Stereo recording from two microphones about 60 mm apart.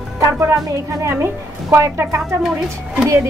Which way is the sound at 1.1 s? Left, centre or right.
Right.